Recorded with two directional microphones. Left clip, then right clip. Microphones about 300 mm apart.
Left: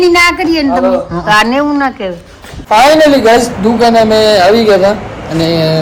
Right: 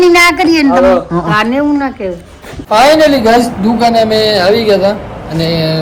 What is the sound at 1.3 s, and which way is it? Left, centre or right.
Speech, left.